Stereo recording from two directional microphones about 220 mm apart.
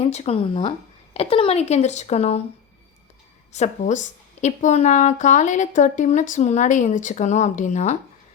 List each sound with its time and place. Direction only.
0.0 s a woman's voice: 30° left (ahead or behind)
3.5 s a woman's voice: 30° left (ahead or behind)